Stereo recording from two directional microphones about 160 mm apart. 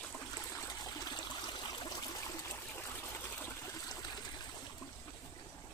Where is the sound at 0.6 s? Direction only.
25° left (ahead or behind).